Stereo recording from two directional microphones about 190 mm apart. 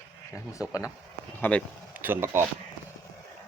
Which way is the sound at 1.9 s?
10° right (ahead or behind).